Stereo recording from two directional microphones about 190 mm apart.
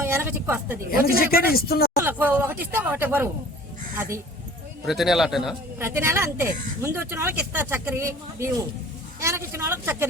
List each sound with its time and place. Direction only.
0.0 s a woman's voice: 15° right (ahead or behind)
0.9 s speech: 50° left (ahead or behind)
2.0 s speech: 10° right (ahead or behind)
4.9 s speech: centre (ahead or behind)
5.8 s speech: 15° right (ahead or behind)